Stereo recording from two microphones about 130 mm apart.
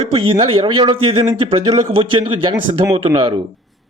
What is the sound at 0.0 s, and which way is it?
A man's voice, 45° right (ahead or behind).